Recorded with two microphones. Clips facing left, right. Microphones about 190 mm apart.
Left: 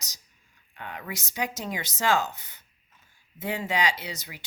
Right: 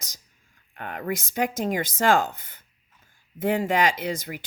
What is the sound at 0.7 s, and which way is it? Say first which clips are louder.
A woman's voice: right 8 dB; 50° right (ahead or behind).